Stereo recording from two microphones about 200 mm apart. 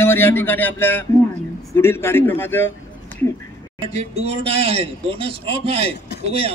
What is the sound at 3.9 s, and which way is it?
A man's voice, 35° right (ahead or behind).